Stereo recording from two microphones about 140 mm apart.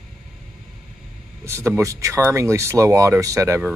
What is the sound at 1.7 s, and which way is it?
Speech, 20° right (ahead or behind).